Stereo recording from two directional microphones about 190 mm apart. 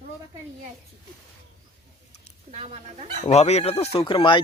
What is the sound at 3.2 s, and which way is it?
Speech, 35° left (ahead or behind).